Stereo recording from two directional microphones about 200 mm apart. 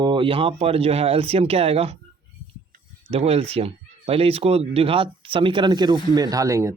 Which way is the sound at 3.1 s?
30° right (ahead or behind).